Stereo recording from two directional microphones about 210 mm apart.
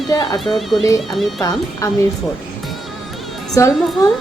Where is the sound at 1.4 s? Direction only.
15° left (ahead or behind).